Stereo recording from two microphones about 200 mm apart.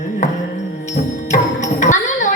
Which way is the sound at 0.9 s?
35° left (ahead or behind).